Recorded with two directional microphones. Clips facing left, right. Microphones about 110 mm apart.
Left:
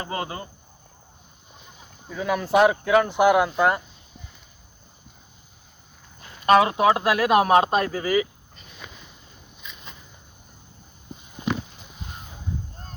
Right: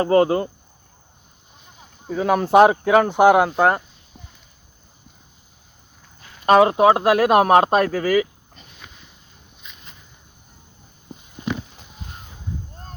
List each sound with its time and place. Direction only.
0.0 s speech: 45° right (ahead or behind)
2.0 s speech: 35° right (ahead or behind)
3.2 s speech: 30° right (ahead or behind)
6.4 s speech: 35° right (ahead or behind)
7.1 s speech: 45° right (ahead or behind)